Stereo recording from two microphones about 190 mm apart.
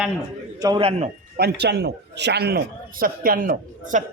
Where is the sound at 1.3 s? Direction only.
60° right (ahead or behind).